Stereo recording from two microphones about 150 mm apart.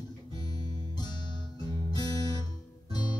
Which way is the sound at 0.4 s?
25° left (ahead or behind).